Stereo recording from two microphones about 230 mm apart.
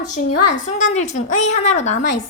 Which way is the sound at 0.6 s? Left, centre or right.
Left.